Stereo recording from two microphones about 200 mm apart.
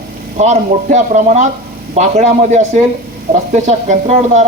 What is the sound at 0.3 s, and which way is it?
Speech, 35° right (ahead or behind).